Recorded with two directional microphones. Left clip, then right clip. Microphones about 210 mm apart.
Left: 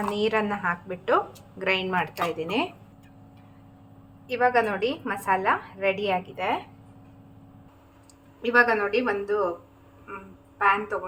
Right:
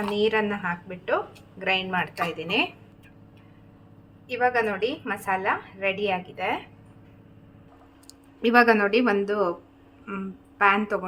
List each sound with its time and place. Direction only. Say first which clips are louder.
0.1 s a woman's voice: right 3 dB; centre (ahead or behind)
4.3 s a woman's voice: left 1 dB; centre (ahead or behind)
8.4 s speech: right 2 dB; 45° right (ahead or behind)
10.6 s speech: right 2 dB; 45° right (ahead or behind)